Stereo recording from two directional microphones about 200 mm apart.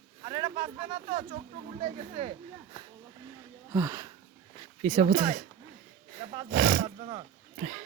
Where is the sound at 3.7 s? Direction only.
15° right (ahead or behind).